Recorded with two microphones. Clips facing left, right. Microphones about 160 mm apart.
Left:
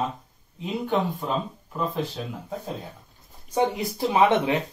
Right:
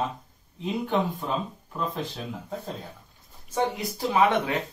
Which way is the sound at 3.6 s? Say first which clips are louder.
Left 3 dB; 20° left (ahead or behind).